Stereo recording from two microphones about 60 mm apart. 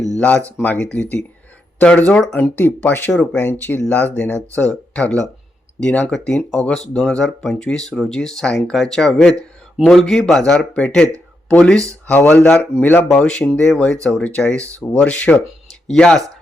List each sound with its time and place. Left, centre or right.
0.6 s speech: left
6.1 s a man's voice: centre; by 13.1 s left
13.1 s a man's voice: centre
15.9 s a man's voice: centre